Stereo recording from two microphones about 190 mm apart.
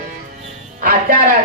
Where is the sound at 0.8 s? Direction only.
45° right (ahead or behind).